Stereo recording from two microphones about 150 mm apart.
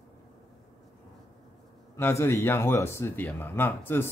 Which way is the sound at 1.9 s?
15° left (ahead or behind).